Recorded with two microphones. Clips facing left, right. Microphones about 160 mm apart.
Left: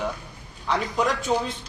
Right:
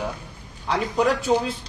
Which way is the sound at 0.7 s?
5° right (ahead or behind).